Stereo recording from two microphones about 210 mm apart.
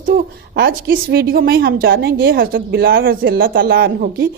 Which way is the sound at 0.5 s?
45° right (ahead or behind).